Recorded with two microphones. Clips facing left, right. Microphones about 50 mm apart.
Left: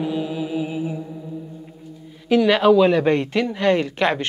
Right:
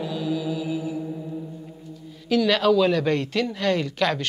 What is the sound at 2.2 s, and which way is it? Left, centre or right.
Speech, left.